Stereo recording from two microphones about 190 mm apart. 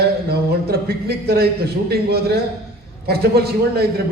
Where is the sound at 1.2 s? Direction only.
55° right (ahead or behind).